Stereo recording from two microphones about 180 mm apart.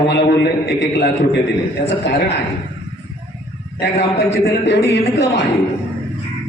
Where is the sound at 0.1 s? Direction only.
70° left (ahead or behind).